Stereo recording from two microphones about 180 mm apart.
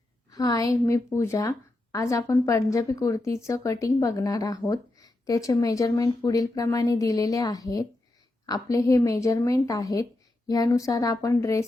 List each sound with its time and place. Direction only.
0.3 s a woman's voice: 20° left (ahead or behind)